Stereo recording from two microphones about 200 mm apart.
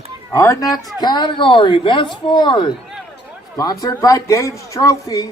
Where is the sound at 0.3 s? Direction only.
15° left (ahead or behind).